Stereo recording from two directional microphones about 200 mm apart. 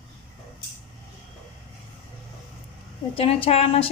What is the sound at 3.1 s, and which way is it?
Speech, 30° left (ahead or behind).